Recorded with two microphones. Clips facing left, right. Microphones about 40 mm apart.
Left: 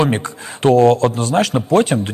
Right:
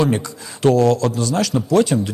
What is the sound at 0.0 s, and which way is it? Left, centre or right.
Speech, left.